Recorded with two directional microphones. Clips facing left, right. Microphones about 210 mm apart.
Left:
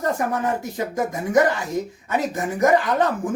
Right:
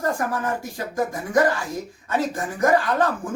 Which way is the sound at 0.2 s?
20° left (ahead or behind).